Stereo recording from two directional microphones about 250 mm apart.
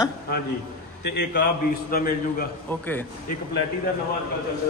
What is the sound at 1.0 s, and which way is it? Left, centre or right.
A man's voice, left.